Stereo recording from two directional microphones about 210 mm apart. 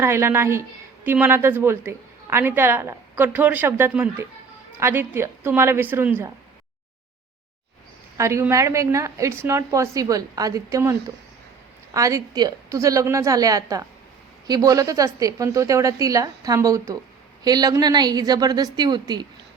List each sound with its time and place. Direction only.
0.0 s a woman's voice: 10° right (ahead or behind)
8.2 s a woman's voice: 15° right (ahead or behind)
11.9 s a woman's voice: 15° right (ahead or behind)